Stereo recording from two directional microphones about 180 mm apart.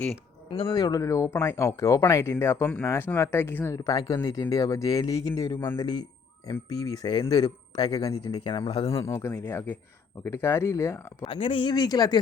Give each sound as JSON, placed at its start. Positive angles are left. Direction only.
{"t": 0.5, "sound": "speech", "side_deg": 25}
{"t": 9.0, "sound": "speech", "side_deg": 15}
{"t": 11.2, "sound": "speech", "side_deg": 30}